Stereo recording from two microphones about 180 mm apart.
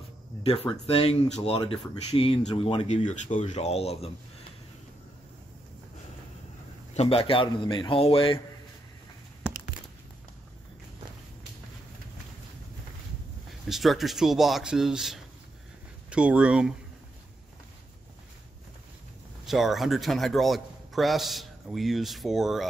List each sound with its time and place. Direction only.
0.4 s speech: 35° left (ahead or behind)
3.0 s speech: 40° left (ahead or behind)
6.9 s speech: 35° left (ahead or behind)
13.7 s a man's voice: centre (ahead or behind)
19.4 s a man's voice: centre (ahead or behind)